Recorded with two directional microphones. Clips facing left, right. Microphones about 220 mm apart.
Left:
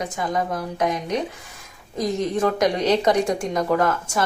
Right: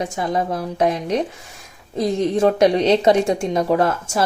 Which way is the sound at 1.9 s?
25° right (ahead or behind).